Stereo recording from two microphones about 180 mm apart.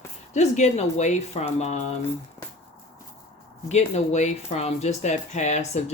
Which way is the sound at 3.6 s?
40° left (ahead or behind).